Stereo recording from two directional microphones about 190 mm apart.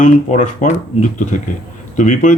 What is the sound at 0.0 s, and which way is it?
Speech, 40° left (ahead or behind).